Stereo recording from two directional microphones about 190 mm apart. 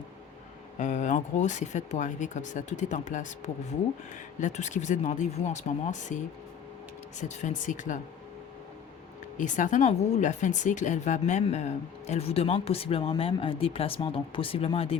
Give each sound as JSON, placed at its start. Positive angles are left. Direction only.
{"t": 0.8, "sound": "speech", "side_deg": 40}
{"t": 9.4, "sound": "speech", "side_deg": 40}